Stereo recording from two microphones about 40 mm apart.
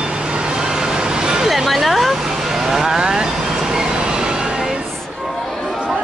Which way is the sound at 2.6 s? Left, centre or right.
Centre.